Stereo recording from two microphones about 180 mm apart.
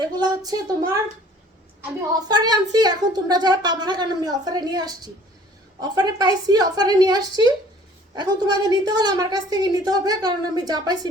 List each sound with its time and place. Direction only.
0.0 s a woman's voice: 20° right (ahead or behind)
2.2 s a woman's voice: 20° right (ahead or behind)